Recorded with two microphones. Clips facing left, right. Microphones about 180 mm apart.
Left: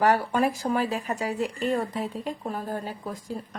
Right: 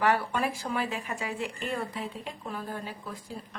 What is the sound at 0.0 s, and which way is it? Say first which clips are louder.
A woman's voice: left 5 dB; 40° left (ahead or behind).